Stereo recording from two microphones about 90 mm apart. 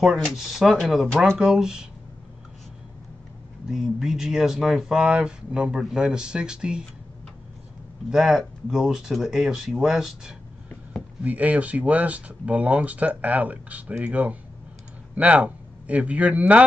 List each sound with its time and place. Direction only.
0.0 s speech: 5° right (ahead or behind)
3.6 s speech: 5° right (ahead or behind)
8.1 s speech: 5° right (ahead or behind)